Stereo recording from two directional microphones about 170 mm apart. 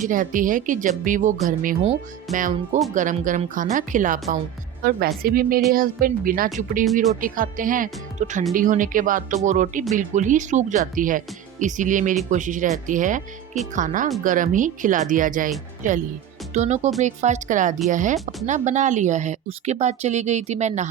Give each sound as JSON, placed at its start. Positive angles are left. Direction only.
{"t": 0.0, "sound": "a woman's voice", "side_deg": -50}
{"t": 4.8, "sound": "a woman's voice", "side_deg": -60}
{"t": 16.6, "sound": "a woman's voice", "side_deg": -45}